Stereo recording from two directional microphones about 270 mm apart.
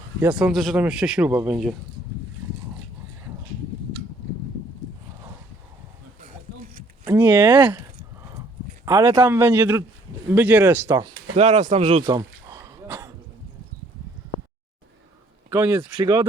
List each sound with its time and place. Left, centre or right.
0.2 s speech: centre
7.0 s speech: centre
8.8 s a man's voice: centre
11.3 s speech: right
12.0 s a sound: centre
15.4 s a man's voice: centre